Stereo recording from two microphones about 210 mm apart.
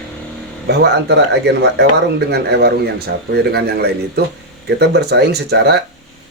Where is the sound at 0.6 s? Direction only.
50° right (ahead or behind).